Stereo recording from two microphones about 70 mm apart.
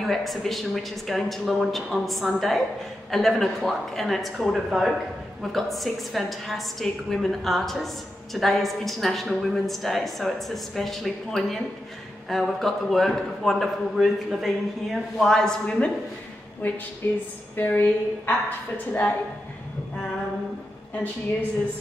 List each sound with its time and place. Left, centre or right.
0.0 s a woman's voice: centre
16.6 s a woman's voice: left